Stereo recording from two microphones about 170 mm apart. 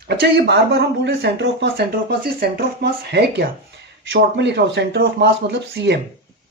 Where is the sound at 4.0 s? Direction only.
90° right.